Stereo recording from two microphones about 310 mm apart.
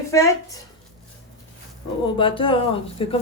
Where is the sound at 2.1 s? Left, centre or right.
Centre.